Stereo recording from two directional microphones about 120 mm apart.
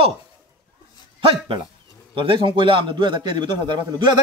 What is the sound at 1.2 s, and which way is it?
A man's voice, 50° right (ahead or behind).